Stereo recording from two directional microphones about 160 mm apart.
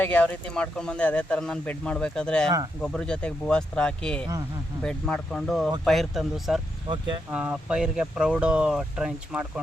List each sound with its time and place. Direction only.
0.0 s speech: 10° left (ahead or behind)
6.8 s speech: 30° right (ahead or behind)
7.3 s speech: 5° right (ahead or behind)